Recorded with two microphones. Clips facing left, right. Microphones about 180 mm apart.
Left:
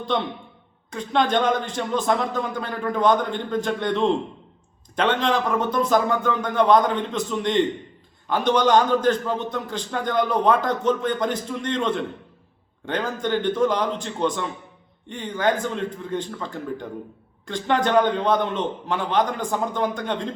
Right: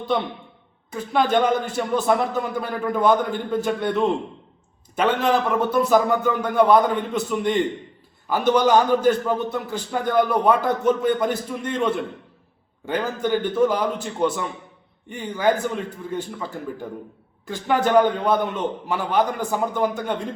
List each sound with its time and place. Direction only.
0.9 s a man's voice: 5° right (ahead or behind)